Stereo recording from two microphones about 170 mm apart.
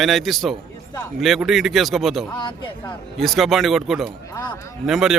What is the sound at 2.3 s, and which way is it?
Speech, 30° left (ahead or behind).